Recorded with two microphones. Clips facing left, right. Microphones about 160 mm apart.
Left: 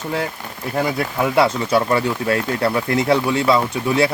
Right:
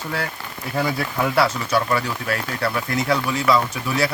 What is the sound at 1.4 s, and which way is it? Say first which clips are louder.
Speech: left 4 dB; 25° left (ahead or behind).